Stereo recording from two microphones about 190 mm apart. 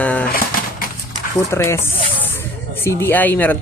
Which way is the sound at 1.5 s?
15° left (ahead or behind).